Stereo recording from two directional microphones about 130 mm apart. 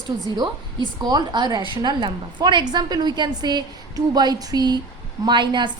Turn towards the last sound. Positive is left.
turn(degrees=-35)  # may be behind; listen again after turning